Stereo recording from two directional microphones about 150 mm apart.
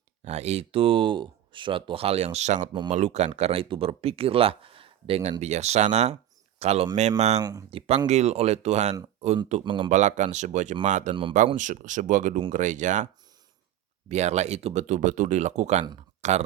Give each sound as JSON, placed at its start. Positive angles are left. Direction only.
{"t": 0.3, "sound": "speech", "side_deg": -45}
{"t": 9.6, "sound": "speech", "side_deg": -30}
{"t": 9.9, "sound": "speech", "side_deg": -55}
{"t": 11.1, "sound": "speech", "side_deg": -35}
{"t": 11.5, "sound": "speech", "side_deg": -55}
{"t": 14.1, "sound": "speech", "side_deg": -50}